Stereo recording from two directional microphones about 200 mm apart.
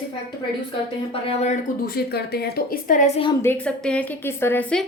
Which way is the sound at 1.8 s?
50° left (ahead or behind).